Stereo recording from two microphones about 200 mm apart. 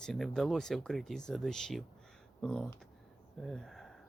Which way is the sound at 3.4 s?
Centre (ahead or behind).